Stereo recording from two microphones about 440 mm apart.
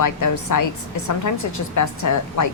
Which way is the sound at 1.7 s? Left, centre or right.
Left.